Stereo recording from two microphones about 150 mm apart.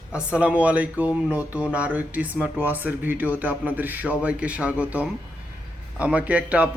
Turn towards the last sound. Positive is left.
turn(degrees=-10)  # may be behind; listen again after turning